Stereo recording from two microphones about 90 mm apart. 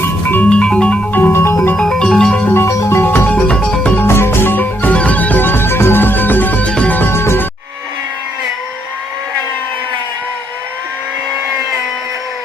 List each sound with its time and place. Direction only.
0.0 s music: 20° left (ahead or behind)
1.2 s music: 30° left (ahead or behind)
1.8 s music: 5° left (ahead or behind)
2.5 s music: 30° left (ahead or behind); by 3.9 s 10° left (ahead or behind)
3.9 s music: 25° left (ahead or behind)